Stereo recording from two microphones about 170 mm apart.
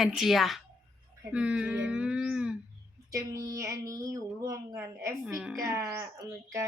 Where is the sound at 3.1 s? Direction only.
20° right (ahead or behind).